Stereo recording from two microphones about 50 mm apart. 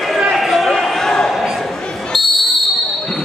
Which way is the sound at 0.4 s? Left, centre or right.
Centre.